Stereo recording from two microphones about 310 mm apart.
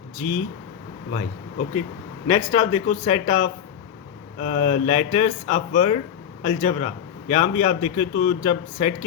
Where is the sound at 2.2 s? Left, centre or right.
Centre.